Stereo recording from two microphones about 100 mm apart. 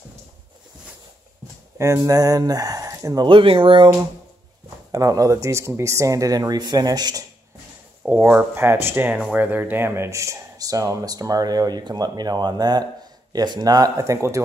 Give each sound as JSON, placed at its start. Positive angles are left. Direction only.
{"t": 1.8, "sound": "speech", "side_deg": -30}
{"t": 3.3, "sound": "speech", "side_deg": -55}
{"t": 4.9, "sound": "speech", "side_deg": -35}
{"t": 8.0, "sound": "speech", "side_deg": -15}